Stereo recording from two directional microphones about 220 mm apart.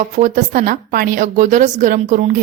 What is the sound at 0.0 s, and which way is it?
A woman's voice, 35° right (ahead or behind).